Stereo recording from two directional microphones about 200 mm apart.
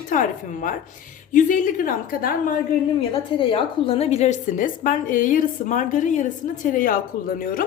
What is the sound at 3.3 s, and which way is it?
A woman's voice, 25° left (ahead or behind).